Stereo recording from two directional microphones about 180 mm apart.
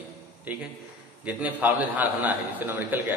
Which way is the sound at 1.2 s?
10° right (ahead or behind).